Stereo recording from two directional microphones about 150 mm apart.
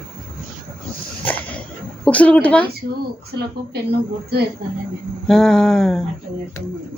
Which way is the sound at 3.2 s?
90° right.